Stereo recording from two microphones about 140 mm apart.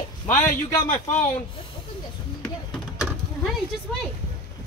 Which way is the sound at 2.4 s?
5° left (ahead or behind).